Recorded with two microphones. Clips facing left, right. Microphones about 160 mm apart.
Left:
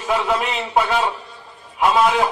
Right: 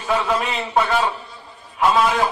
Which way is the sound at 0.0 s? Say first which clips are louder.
Left 1 dB; 15° left (ahead or behind).